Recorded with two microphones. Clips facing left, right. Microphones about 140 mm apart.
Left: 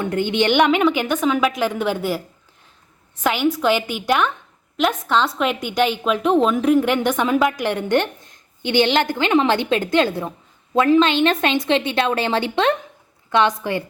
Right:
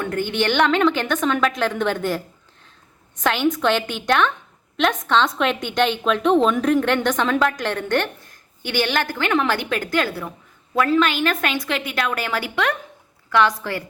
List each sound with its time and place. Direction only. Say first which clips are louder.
0.0 s a woman's voice: left 3 dB; 20° left (ahead or behind)